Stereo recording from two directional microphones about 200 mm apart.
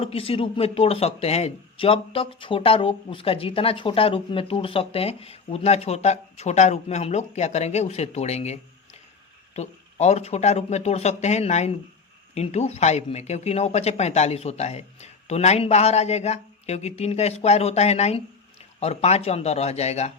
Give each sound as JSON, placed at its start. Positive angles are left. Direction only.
{"t": 0.0, "sound": "speech", "side_deg": 30}
{"t": 9.6, "sound": "speech", "side_deg": 35}